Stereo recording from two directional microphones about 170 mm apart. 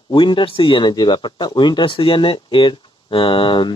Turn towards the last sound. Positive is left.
turn(degrees=30)  # may be behind; listen again after turning